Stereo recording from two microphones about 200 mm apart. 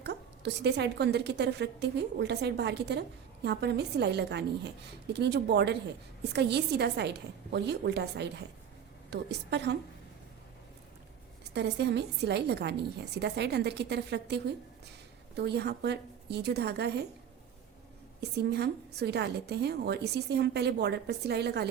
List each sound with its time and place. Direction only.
0.0 s a woman's voice: 55° right (ahead or behind)
11.5 s a woman's voice: 60° right (ahead or behind)
18.2 s a woman's voice: 55° right (ahead or behind)